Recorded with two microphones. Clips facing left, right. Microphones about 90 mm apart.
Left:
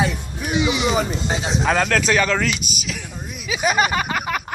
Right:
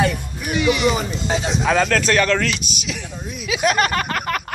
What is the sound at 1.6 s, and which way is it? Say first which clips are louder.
A man's voice: right 1 dB; 5° left (ahead or behind).